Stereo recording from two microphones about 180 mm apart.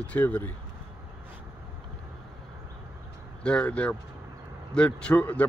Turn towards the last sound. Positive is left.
turn(degrees=10)  # may be behind; listen again after turning